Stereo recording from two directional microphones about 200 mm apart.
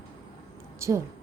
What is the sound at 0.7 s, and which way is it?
Speech, 15° right (ahead or behind).